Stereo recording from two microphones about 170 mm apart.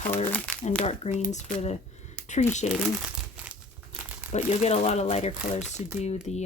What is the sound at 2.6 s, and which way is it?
Speech, 40° left (ahead or behind).